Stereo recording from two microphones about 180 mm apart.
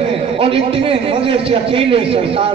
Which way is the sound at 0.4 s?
30° right (ahead or behind).